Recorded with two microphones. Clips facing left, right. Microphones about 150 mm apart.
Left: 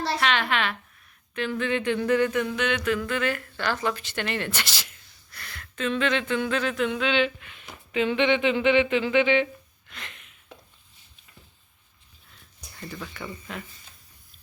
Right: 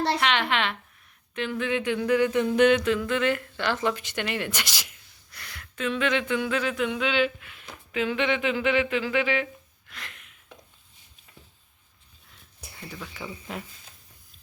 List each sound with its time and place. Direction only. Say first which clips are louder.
0.0 s a woman's voice: right 1 dB; 20° right (ahead or behind)
2.3 s a woman's voice: right 6 dB; 30° right (ahead or behind); by 9.5 s centre (ahead or behind)
9.9 s a sound: left 1 dB; centre (ahead or behind)
12.6 s speech: left 2 dB; 5° right (ahead or behind)